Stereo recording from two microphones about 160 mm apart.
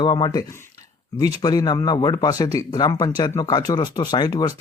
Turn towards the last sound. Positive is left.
turn(degrees=25)  # may be behind; listen again after turning